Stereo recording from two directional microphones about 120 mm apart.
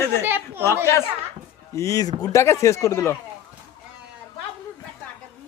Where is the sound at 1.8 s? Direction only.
30° left (ahead or behind).